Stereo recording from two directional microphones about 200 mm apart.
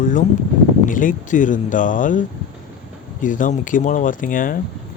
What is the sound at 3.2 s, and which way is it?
Speech, 40° left (ahead or behind).